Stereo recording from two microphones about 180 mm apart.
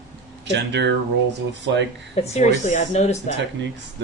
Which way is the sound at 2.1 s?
40° left (ahead or behind).